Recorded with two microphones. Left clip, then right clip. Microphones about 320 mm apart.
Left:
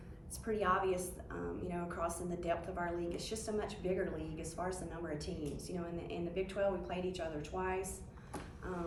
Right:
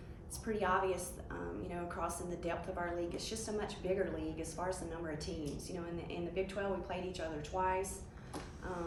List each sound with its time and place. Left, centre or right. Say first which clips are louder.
0.4 s a woman's voice: even; centre